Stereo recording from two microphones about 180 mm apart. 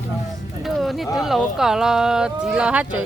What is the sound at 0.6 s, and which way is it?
Speech, centre (ahead or behind).